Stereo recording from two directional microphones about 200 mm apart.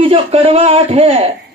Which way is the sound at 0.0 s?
30° right (ahead or behind).